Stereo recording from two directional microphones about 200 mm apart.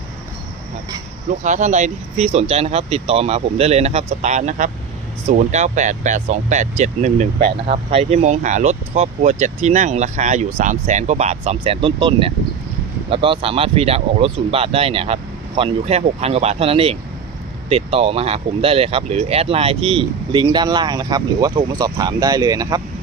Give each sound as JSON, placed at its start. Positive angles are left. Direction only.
{"t": 1.5, "sound": "speech", "side_deg": -35}